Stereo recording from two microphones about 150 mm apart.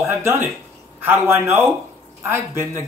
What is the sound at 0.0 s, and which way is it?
Speech, 15° right (ahead or behind).